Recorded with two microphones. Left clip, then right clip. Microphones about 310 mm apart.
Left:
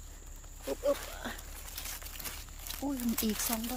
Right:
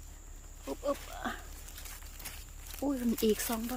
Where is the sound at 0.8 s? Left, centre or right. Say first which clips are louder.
Left 2 dB; centre.